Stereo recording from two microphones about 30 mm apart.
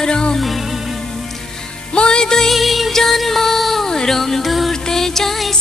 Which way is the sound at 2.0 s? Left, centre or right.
Left.